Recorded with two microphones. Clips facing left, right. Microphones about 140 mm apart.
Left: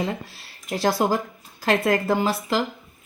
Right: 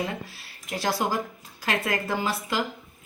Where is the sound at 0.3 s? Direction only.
30° left (ahead or behind).